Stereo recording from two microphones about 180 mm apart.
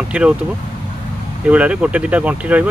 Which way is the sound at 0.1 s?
5° right (ahead or behind).